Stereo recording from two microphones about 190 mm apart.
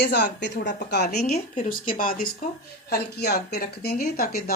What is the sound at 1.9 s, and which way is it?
Speech, 50° left (ahead or behind).